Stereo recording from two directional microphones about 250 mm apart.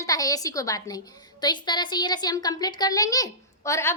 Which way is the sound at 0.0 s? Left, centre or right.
Centre.